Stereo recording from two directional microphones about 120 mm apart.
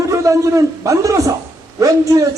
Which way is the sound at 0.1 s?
25° right (ahead or behind).